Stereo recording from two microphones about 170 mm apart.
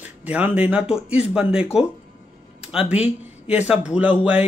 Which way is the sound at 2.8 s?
40° left (ahead or behind).